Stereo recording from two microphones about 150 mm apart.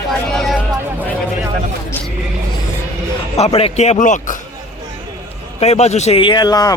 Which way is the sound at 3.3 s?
45° left (ahead or behind).